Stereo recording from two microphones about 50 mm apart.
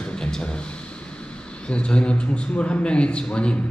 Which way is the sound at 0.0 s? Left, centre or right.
Centre.